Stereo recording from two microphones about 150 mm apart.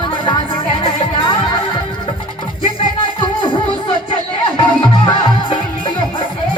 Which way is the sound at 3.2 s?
30° left (ahead or behind).